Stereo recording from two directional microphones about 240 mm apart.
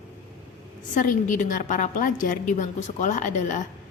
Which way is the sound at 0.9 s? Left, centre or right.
Left.